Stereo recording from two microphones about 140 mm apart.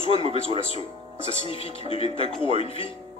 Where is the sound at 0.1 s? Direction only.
45° left (ahead or behind).